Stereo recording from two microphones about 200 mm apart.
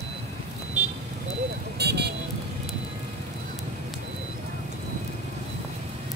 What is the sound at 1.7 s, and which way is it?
Vehicle, 55° right (ahead or behind).